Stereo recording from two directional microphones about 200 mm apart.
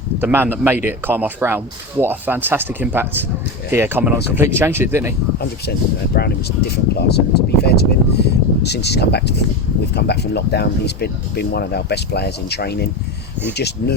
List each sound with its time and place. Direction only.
0.2 s speech: 10° right (ahead or behind)
6.1 s speech: 50° left (ahead or behind)